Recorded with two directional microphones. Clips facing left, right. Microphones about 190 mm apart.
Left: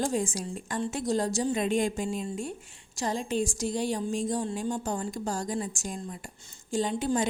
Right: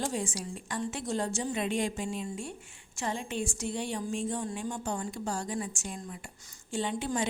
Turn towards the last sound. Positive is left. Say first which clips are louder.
# left 4 dB
turn(degrees=40)  # may be behind; listen again after turning